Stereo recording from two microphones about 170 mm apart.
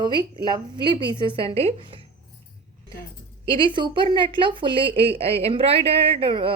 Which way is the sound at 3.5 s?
30° right (ahead or behind).